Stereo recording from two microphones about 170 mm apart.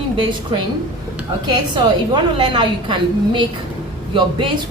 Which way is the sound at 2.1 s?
30° right (ahead or behind).